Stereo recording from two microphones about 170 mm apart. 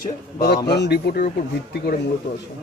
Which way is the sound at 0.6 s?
75° left (ahead or behind).